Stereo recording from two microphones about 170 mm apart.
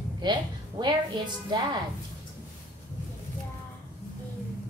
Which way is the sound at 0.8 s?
25° right (ahead or behind).